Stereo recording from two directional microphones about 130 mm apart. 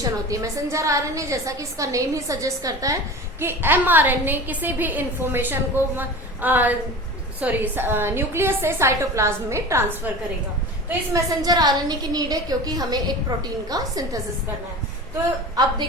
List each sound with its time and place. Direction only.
0.0 s a woman's voice: 25° right (ahead or behind)
10.8 s a woman's voice: 25° right (ahead or behind)
15.6 s a woman's voice: 30° right (ahead or behind)